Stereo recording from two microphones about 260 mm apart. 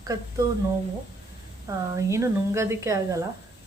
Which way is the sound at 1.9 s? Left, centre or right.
Centre.